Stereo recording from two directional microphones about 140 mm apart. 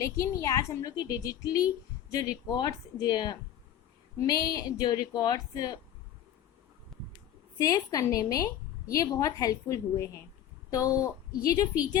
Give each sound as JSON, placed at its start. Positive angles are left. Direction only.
{"t": 0.0, "sound": "a woman's voice", "side_deg": 25}
{"t": 6.9, "sound": "heart sounds", "side_deg": 0}
{"t": 7.6, "sound": "a woman's voice", "side_deg": 25}